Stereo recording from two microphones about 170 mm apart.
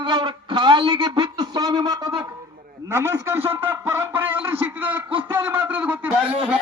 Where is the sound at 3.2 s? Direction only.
15° right (ahead or behind).